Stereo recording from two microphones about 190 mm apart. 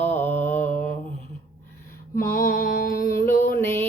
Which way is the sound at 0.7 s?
40° left (ahead or behind).